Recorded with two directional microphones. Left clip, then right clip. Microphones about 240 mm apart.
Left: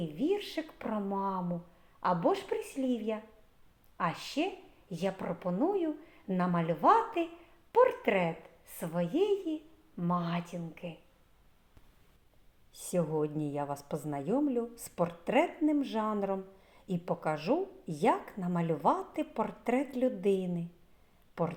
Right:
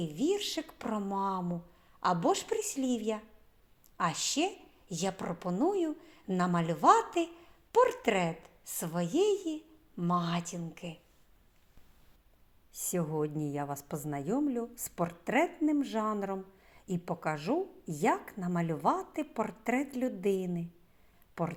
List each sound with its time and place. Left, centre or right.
0.0 s a woman's voice: right
12.7 s a woman's voice: right